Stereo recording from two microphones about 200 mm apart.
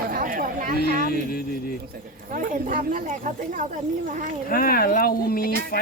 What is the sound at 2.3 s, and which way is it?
Speech, 40° right (ahead or behind).